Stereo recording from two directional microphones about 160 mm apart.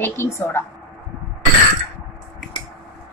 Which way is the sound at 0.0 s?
15° left (ahead or behind).